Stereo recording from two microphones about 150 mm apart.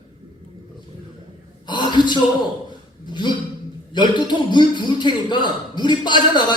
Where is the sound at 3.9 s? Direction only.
30° left (ahead or behind).